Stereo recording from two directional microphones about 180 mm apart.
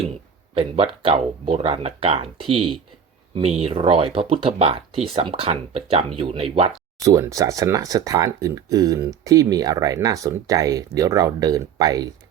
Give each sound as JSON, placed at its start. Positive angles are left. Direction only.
{"t": 0.5, "sound": "speech", "side_deg": -30}
{"t": 3.3, "sound": "speech", "side_deg": -35}
{"t": 7.0, "sound": "speech", "side_deg": -15}